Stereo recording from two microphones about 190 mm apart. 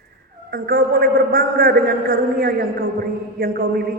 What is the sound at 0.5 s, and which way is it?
A man's voice, 50° right (ahead or behind).